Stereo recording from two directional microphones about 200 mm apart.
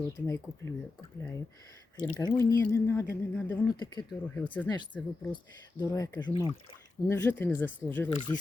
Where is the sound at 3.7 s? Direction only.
20° left (ahead or behind).